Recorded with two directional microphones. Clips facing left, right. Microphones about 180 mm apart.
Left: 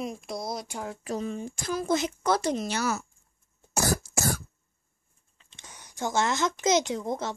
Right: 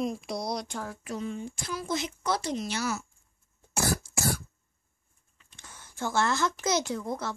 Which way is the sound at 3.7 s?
40° left (ahead or behind).